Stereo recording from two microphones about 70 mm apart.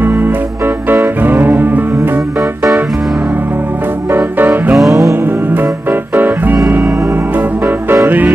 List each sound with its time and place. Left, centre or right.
0.0 s music: right
4.4 s music: right
4.7 s music: centre
5.2 s music: right